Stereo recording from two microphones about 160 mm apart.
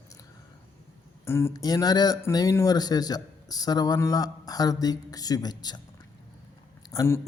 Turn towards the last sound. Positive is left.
turn(degrees=20)  # may be behind; listen again after turning